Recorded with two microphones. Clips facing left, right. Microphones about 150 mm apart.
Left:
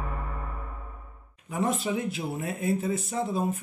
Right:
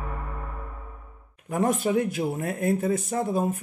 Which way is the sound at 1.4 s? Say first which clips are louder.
Right 4 dB; 50° right (ahead or behind).